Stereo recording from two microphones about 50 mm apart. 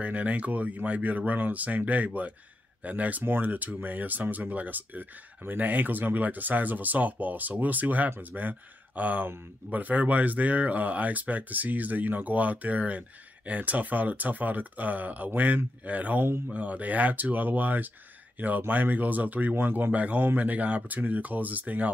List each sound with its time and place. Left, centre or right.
0.0 s speech: right
19.9 s speech: right